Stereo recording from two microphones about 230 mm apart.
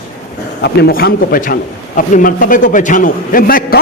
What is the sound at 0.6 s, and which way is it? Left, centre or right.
A man's voice, left.